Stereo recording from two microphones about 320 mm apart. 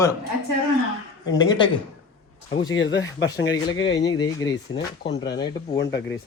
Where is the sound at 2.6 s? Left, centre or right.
Left.